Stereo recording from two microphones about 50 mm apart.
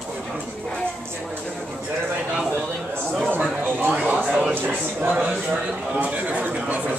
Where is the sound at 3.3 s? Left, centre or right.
Right.